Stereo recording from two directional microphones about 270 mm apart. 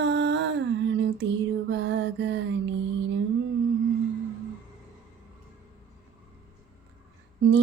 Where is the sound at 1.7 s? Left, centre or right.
Right.